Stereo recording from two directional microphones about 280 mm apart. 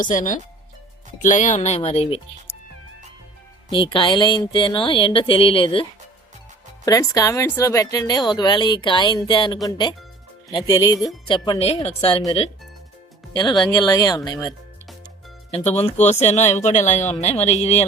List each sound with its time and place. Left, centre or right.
0.0 s speech: left
3.7 s a woman's voice: centre
6.8 s a woman's voice: centre
15.5 s speech: left